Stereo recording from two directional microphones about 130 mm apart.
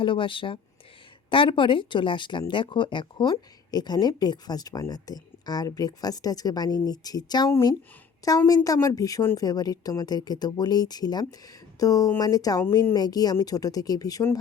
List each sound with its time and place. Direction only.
0.0 s a woman's voice: 40° left (ahead or behind)